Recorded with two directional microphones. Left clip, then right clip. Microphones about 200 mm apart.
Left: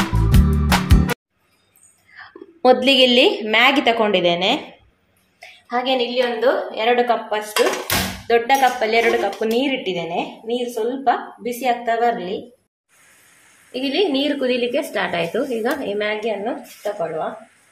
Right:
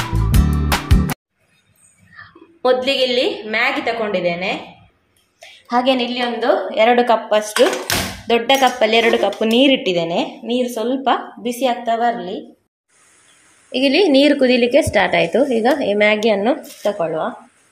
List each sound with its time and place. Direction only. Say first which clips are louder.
0.0 s music: left 1 dB; centre (ahead or behind)
2.6 s a woman's voice: left 2 dB; 20° left (ahead or behind)
5.4 s a sound: right 5 dB; 30° right (ahead or behind)
6.7 s speech: right 4 dB; 35° right (ahead or behind)
11.5 s a woman's voice: right 2 dB; 20° right (ahead or behind)
13.7 s a woman's voice: right 6 dB; 35° right (ahead or behind)
16.1 s speech: right 7 dB; 40° right (ahead or behind)